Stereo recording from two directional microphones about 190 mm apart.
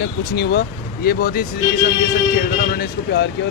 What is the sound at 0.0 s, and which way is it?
Speech, 60° left (ahead or behind).